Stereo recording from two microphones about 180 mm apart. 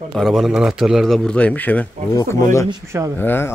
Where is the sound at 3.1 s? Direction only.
10° left (ahead or behind).